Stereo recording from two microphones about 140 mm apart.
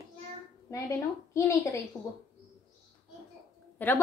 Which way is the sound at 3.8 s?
15° left (ahead or behind).